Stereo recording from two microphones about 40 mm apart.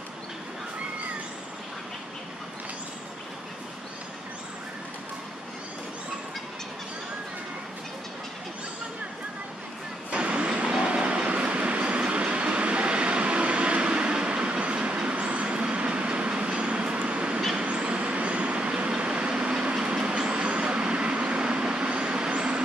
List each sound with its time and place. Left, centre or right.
10.1 s vehicle: right